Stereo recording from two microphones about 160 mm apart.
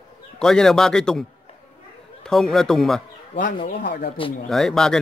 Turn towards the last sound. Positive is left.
turn(degrees=5)  # may be behind; listen again after turning